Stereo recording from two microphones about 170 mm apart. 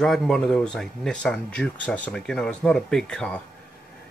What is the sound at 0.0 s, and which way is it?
A man's voice, centre (ahead or behind).